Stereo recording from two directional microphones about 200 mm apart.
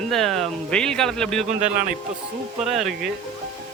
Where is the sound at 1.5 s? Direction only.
35° right (ahead or behind).